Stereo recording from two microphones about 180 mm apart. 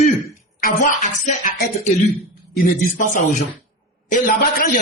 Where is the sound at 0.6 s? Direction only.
45° left (ahead or behind).